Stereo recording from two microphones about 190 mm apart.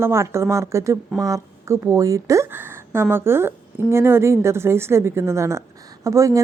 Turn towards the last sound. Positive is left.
turn(degrees=-15)  # may be behind; listen again after turning